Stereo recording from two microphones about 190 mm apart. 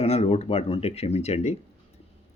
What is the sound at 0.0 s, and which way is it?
Speech, 30° left (ahead or behind).